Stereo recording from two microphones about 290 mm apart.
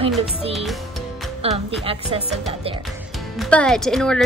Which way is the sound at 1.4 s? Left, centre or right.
Centre.